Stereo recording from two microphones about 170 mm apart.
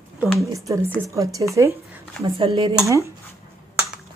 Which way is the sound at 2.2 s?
30° right (ahead or behind).